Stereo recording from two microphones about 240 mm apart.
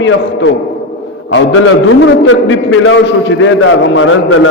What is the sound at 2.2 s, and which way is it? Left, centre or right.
A man's voice, left.